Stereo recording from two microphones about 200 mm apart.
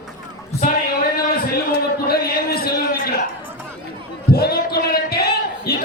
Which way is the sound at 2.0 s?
50° left (ahead or behind).